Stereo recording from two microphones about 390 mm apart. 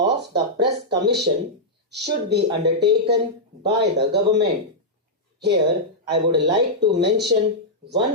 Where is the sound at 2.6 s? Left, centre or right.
Right.